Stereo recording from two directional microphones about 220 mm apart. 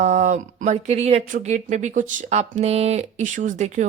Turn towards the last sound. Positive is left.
turn(degrees=-35)  # may be behind; listen again after turning